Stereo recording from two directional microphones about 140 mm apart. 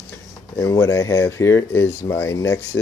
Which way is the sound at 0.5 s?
20° left (ahead or behind).